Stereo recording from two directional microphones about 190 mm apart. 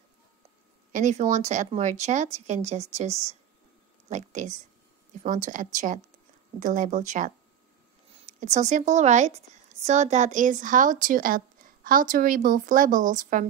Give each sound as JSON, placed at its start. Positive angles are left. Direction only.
{"t": 0.9, "sound": "speech", "side_deg": -40}